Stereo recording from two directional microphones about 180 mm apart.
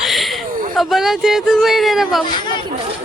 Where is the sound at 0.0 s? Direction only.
Centre (ahead or behind).